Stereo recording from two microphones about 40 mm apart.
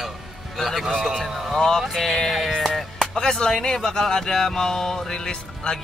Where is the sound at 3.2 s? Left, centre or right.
Centre.